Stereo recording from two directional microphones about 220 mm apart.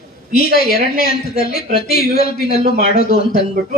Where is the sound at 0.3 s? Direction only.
45° left (ahead or behind).